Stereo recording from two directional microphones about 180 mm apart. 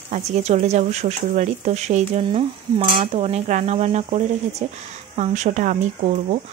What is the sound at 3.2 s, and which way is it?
Speech, 35° right (ahead or behind).